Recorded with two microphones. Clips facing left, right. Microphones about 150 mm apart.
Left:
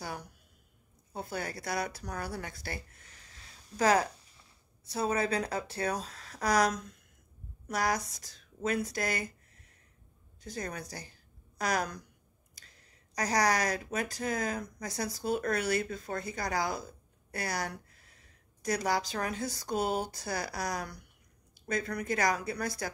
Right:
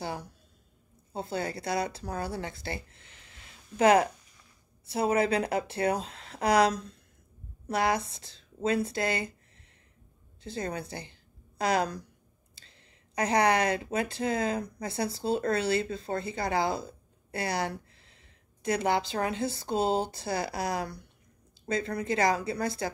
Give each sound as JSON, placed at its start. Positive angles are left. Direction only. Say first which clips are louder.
{"t": 0.0, "sound": "a sound", "louder": "right 5 dB", "side_deg": -25}
{"t": 1.1, "sound": "speech", "louder": "right 4 dB", "side_deg": -25}
{"t": 10.4, "sound": "a woman's voice", "louder": "right 4 dB", "side_deg": -25}